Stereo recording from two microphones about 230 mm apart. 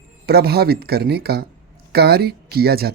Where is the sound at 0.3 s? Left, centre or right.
Right.